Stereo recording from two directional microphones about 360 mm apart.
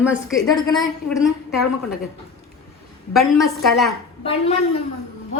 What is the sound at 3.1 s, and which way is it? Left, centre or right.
Speech, centre.